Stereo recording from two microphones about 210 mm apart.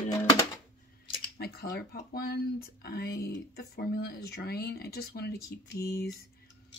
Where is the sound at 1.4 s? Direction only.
50° left (ahead or behind).